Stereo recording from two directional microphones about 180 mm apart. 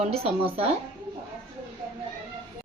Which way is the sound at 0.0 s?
35° right (ahead or behind).